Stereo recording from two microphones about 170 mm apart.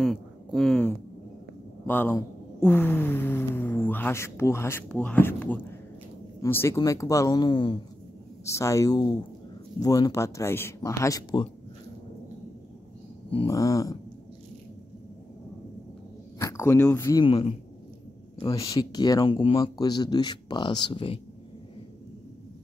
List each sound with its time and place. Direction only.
0.0 s speech: centre (ahead or behind); by 11.4 s 20° left (ahead or behind)
13.5 s speech: 20° left (ahead or behind)
16.3 s speech: 15° left (ahead or behind)
17.2 s a man's voice: 35° left (ahead or behind)
18.4 s speech: 20° left (ahead or behind)